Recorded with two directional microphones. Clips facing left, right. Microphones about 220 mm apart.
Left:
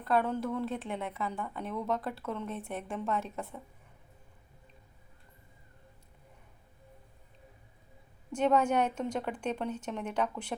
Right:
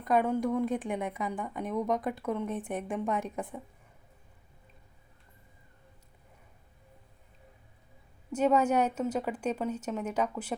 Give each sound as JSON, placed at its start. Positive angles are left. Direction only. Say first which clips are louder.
{"t": 0.0, "sound": "a woman's voice", "louder": "right 3 dB", "side_deg": -15}
{"t": 8.3, "sound": "a woman's voice", "louder": "right 2 dB", "side_deg": -5}